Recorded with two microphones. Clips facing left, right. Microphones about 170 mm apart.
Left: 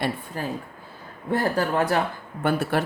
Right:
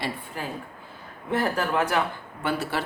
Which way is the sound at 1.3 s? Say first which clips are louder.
Left 2 dB; 35° left (ahead or behind).